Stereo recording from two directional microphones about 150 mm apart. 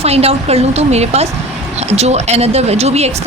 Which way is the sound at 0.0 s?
45° right (ahead or behind).